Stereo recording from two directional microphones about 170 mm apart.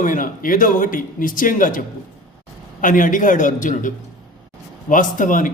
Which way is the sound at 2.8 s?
50° left (ahead or behind).